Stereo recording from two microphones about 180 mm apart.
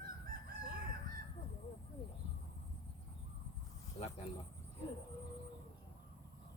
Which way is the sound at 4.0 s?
35° left (ahead or behind).